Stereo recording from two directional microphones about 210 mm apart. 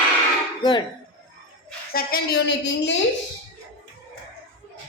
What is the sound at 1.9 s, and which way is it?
Speech, 45° left (ahead or behind).